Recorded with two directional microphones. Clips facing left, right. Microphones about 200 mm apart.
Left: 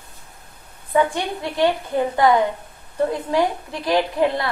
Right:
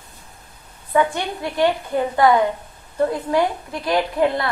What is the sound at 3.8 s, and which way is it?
Speech, 25° left (ahead or behind).